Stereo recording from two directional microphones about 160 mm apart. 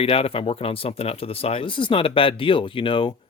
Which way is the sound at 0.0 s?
35° left (ahead or behind).